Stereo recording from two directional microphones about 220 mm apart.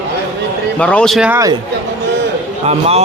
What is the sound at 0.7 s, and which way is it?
Speech, 5° left (ahead or behind).